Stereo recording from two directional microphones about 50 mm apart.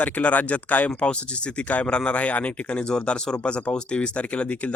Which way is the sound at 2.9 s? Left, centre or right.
Centre.